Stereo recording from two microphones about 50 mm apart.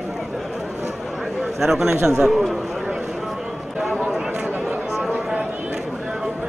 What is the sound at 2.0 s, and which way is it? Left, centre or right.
Speech, centre.